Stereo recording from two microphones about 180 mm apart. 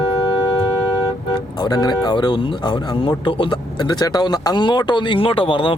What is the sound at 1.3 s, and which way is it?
Speech, 20° left (ahead or behind).